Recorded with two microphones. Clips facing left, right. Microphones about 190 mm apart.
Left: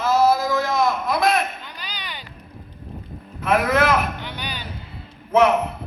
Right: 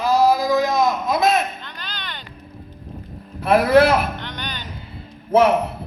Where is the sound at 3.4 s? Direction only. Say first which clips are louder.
Right 5 dB; 35° right (ahead or behind).